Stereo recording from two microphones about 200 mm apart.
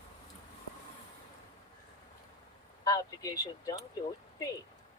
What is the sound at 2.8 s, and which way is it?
Speech, 20° left (ahead or behind).